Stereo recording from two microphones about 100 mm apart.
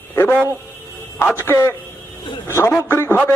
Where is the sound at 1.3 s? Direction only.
25° left (ahead or behind).